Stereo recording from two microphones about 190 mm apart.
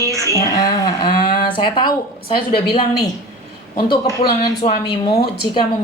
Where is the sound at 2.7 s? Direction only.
25° left (ahead or behind).